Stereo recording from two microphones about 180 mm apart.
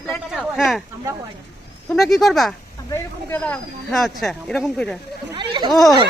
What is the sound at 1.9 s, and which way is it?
Speech, centre (ahead or behind).